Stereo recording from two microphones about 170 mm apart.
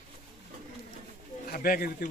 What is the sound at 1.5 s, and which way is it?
Speech, 60° left (ahead or behind).